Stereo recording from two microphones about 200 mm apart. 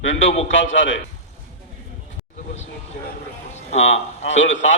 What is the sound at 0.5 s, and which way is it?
Speech, 70° left (ahead or behind).